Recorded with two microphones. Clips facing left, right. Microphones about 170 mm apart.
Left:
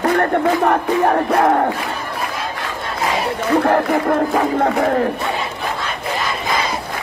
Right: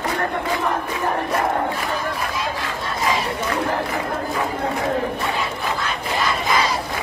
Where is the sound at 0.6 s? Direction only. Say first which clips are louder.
Left 8 dB; 65° left (ahead or behind).